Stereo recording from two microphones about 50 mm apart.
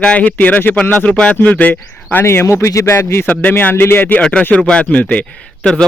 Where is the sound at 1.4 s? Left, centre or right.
Left.